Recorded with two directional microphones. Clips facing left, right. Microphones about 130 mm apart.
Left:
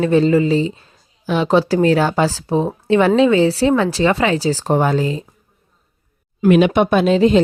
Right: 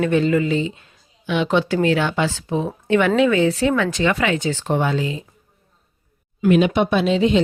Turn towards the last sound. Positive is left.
turn(degrees=45)  # may be behind; listen again after turning